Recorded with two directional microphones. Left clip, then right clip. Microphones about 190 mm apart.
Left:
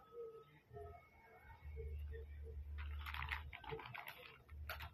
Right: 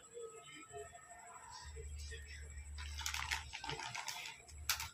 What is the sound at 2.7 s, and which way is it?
Bathtub, 20° right (ahead or behind).